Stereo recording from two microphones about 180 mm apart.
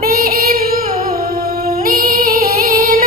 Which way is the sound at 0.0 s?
55° right (ahead or behind).